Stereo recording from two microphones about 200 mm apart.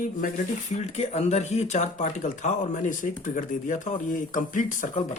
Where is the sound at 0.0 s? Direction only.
45° left (ahead or behind).